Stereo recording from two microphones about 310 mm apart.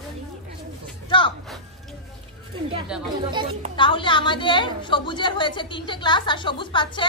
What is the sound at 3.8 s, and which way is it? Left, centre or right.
A woman's voice, centre.